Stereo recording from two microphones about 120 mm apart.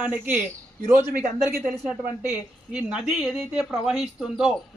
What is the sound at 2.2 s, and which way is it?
A woman's voice, 10° right (ahead or behind).